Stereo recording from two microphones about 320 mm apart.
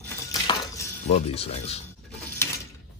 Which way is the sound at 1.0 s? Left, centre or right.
Centre.